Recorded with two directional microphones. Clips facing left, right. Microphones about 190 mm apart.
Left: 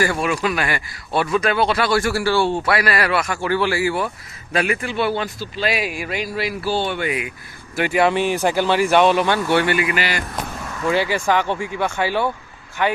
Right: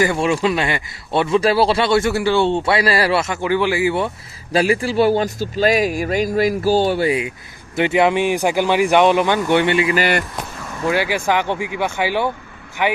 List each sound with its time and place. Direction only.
0.0 s a man's voice: 25° right (ahead or behind)
9.9 s speech: 50° right (ahead or behind)
10.8 s speech: 10° right (ahead or behind)